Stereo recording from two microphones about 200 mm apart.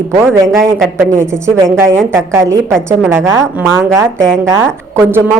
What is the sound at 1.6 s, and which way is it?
Speech, 5° left (ahead or behind).